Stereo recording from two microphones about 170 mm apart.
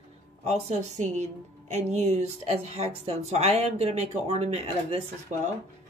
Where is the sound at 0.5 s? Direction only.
40° right (ahead or behind).